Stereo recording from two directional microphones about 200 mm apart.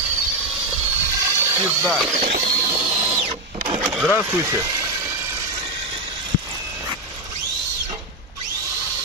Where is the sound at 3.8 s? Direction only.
5° right (ahead or behind).